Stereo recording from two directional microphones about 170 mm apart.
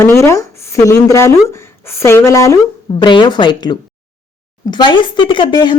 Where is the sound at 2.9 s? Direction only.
30° left (ahead or behind).